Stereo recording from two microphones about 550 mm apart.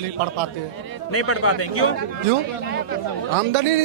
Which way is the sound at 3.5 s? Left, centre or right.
Right.